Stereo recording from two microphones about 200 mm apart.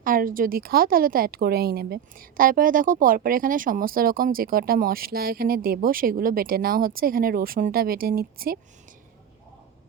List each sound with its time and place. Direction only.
0.0 s a woman's voice: 45° right (ahead or behind)